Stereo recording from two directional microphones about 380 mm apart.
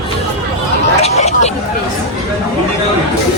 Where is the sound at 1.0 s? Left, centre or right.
Centre.